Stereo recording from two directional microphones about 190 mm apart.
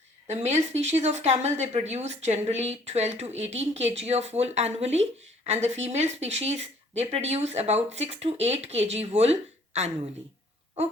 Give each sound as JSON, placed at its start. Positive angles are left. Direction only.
{"t": 0.3, "sound": "speech", "side_deg": -35}